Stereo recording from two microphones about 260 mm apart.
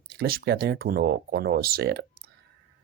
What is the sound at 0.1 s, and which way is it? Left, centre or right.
Speech, right.